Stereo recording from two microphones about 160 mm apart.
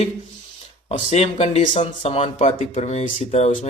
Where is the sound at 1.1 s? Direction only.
40° left (ahead or behind).